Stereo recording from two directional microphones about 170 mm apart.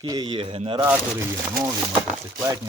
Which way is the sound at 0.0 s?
25° right (ahead or behind).